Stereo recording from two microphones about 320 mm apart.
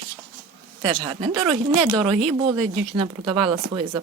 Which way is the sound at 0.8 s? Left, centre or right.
Centre.